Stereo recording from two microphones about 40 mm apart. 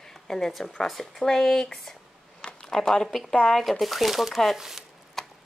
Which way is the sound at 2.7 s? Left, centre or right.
Centre.